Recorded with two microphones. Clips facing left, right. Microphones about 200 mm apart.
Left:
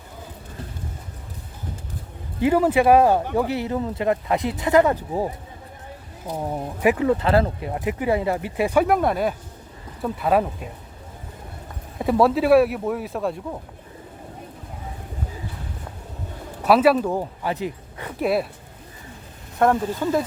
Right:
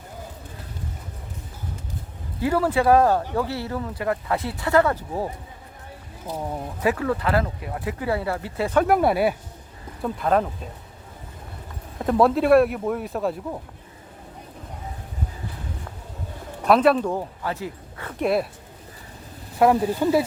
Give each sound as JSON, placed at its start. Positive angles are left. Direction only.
{"t": 2.4, "sound": "speech", "side_deg": 20}
{"t": 8.9, "sound": "speech", "side_deg": -5}
{"t": 10.0, "sound": "speech", "side_deg": 5}
{"t": 11.9, "sound": "speech", "side_deg": 5}
{"t": 16.6, "sound": "speech", "side_deg": 5}
{"t": 18.2, "sound": "speech", "side_deg": 0}
{"t": 19.5, "sound": "speech", "side_deg": -10}